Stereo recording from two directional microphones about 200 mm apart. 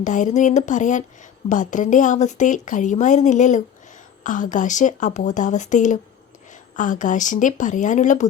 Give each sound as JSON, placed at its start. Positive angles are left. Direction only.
{"t": 0.0, "sound": "speech", "side_deg": 40}